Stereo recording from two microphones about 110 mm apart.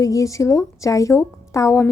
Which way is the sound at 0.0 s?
30° left (ahead or behind).